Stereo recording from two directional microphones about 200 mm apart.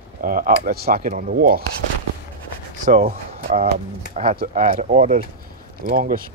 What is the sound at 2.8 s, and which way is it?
Speech, 40° right (ahead or behind).